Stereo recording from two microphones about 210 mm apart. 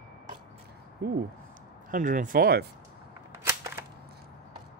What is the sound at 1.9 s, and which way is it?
Speech, 40° right (ahead or behind).